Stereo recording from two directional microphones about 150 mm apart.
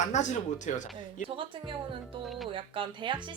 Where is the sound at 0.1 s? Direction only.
50° left (ahead or behind).